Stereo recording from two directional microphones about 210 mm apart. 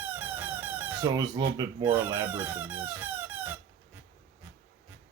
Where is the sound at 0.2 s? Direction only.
10° right (ahead or behind).